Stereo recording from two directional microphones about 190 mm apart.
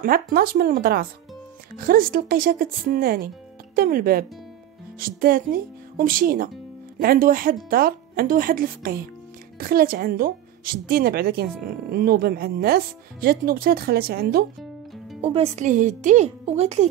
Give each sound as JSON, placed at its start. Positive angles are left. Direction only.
{"t": 0.0, "sound": "a woman's voice", "side_deg": -50}
{"t": 15.2, "sound": "a woman's voice", "side_deg": -30}